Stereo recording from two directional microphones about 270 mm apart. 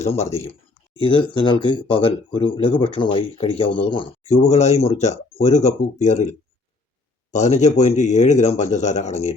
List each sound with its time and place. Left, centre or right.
0.0 s speech: left